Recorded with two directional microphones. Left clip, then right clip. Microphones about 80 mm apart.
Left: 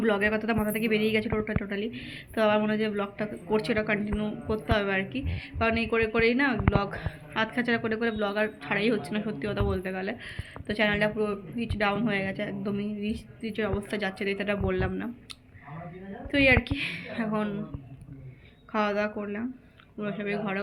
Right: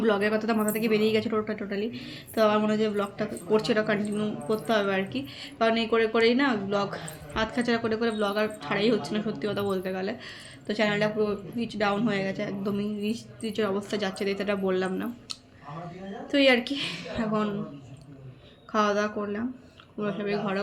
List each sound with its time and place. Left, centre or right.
0.0 s a woman's voice: right
12.7 s a woman's voice: right
18.7 s a woman's voice: right